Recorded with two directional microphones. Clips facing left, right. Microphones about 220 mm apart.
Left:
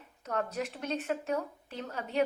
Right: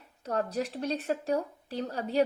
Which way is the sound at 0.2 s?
35° right (ahead or behind).